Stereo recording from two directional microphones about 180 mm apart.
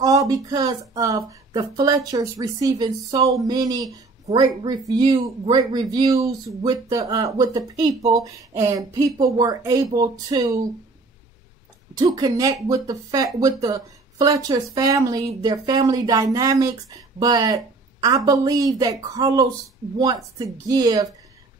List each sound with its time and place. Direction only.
0.0 s speech: 20° right (ahead or behind)
12.0 s speech: 20° right (ahead or behind)